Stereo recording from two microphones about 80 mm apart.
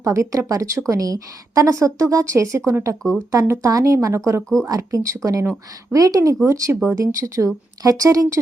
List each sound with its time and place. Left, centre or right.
0.0 s a woman's voice: right